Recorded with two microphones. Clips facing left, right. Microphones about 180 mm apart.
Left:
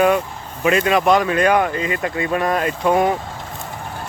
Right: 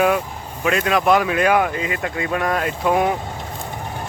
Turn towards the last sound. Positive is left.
turn(degrees=0)  # may be behind; listen again after turning